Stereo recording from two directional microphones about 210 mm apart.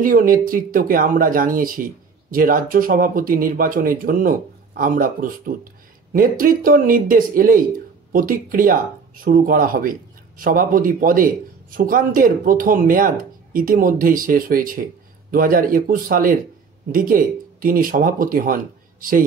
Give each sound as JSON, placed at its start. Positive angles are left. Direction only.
{"t": 0.0, "sound": "speech", "side_deg": -40}